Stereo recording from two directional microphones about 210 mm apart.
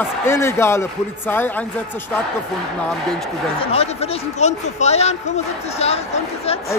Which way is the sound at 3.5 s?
30° left (ahead or behind).